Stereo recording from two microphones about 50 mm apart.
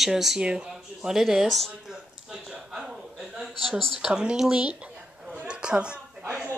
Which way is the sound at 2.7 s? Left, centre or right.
Centre.